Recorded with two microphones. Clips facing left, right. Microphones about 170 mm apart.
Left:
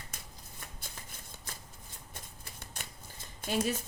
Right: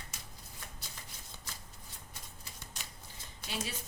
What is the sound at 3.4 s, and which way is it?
Speech, 45° left (ahead or behind).